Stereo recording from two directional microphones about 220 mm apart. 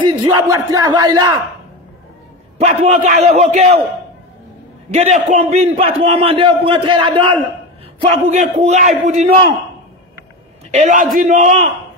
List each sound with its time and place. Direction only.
0.2 s speech: 15° right (ahead or behind)
2.6 s a man's voice: 30° right (ahead or behind)
4.9 s a man's voice: 30° right (ahead or behind)
10.7 s a man's voice: 35° right (ahead or behind)